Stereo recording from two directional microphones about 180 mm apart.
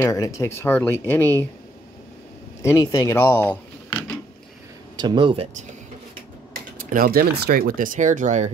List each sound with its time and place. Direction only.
0.0 s speech: 15° left (ahead or behind)
2.6 s speech: 15° left (ahead or behind)
4.9 s speech: 25° right (ahead or behind)
6.5 s speech: 50° right (ahead or behind)